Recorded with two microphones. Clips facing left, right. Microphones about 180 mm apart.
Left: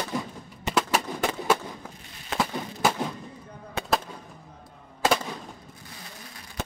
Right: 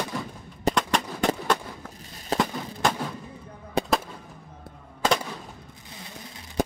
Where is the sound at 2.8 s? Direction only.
5° left (ahead or behind).